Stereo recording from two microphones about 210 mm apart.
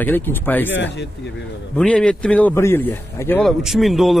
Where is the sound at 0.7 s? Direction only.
55° left (ahead or behind).